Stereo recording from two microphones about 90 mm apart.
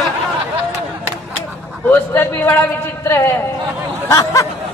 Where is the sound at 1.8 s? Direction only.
25° left (ahead or behind).